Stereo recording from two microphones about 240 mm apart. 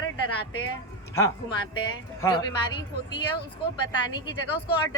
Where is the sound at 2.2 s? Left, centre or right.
Centre.